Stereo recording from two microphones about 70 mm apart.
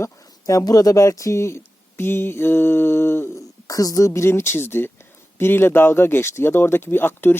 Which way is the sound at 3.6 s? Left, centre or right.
Left.